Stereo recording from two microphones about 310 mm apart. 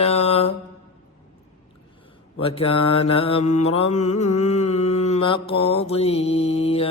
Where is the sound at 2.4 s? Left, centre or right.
Centre.